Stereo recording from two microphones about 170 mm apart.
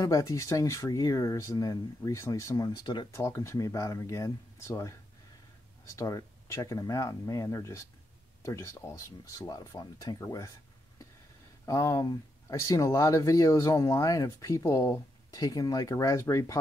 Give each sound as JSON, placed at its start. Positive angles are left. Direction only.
{"t": 0.0, "sound": "speech", "side_deg": 20}
{"t": 3.1, "sound": "speech", "side_deg": 15}
{"t": 11.6, "sound": "speech", "side_deg": 15}